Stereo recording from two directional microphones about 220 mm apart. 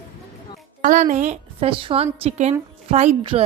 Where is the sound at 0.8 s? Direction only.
35° right (ahead or behind).